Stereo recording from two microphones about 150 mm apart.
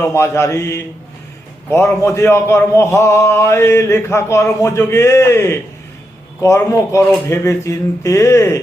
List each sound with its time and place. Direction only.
0.0 s a man's voice: 20° left (ahead or behind)